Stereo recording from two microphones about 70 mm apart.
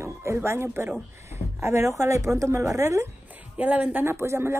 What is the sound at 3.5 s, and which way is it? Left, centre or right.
Speech, right.